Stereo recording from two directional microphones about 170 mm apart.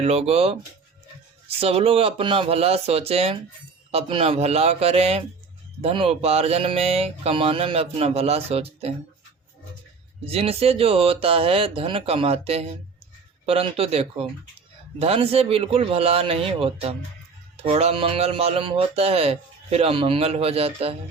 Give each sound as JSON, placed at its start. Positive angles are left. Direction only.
{"t": 0.0, "sound": "speech", "side_deg": -35}
{"t": 10.2, "sound": "speech", "side_deg": -35}